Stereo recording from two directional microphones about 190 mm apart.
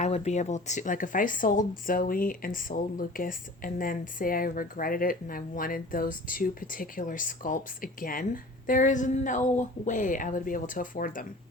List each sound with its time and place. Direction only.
0.0 s speech: 35° left (ahead or behind)